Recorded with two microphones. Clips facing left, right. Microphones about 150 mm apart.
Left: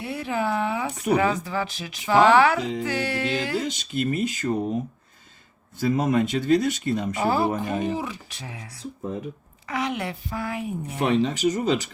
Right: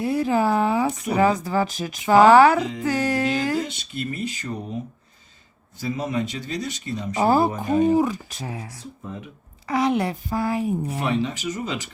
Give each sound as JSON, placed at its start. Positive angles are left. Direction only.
{"t": 0.0, "sound": "speech", "side_deg": -40}
{"t": 3.7, "sound": "speech", "side_deg": 45}
{"t": 5.7, "sound": "speech", "side_deg": 50}
{"t": 7.2, "sound": "speech", "side_deg": -40}
{"t": 11.0, "sound": "speech", "side_deg": 40}